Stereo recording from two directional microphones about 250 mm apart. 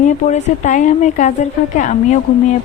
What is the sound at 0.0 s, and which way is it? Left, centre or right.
A woman's voice, left.